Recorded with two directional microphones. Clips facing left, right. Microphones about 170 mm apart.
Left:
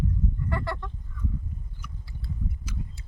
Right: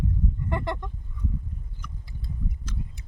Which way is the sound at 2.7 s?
10° left (ahead or behind).